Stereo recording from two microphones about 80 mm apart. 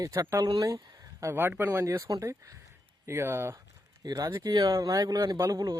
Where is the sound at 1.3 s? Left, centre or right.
Right.